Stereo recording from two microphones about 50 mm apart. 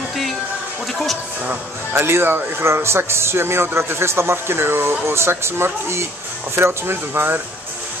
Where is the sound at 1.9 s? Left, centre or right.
Right.